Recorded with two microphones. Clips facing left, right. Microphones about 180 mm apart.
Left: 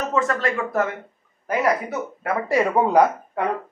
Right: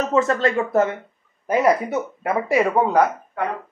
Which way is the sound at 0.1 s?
25° right (ahead or behind).